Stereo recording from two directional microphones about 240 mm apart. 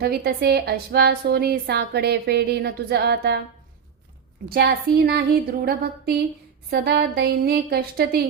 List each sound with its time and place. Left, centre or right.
0.0 s a woman's voice: right
4.4 s a woman's voice: right